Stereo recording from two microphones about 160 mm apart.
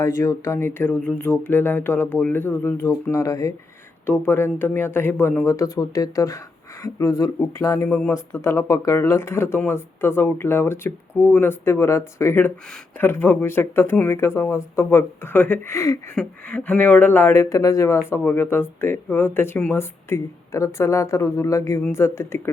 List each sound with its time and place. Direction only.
0.0 s speech: 20° left (ahead or behind)
7.9 s speech: centre (ahead or behind)
8.1 s speech: 15° left (ahead or behind)